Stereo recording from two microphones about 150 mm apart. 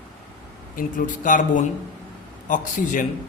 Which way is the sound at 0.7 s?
60° left (ahead or behind).